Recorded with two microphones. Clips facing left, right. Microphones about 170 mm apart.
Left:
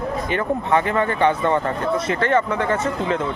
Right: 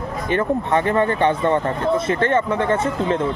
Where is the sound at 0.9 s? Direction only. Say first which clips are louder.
Right 1 dB; 20° right (ahead or behind).